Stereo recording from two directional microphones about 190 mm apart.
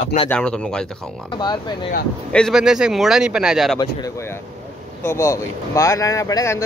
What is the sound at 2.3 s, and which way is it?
Speech, 5° left (ahead or behind).